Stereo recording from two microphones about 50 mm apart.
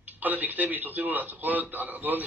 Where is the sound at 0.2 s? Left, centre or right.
Right.